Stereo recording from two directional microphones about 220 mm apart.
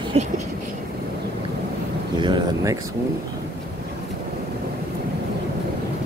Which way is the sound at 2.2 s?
15° right (ahead or behind).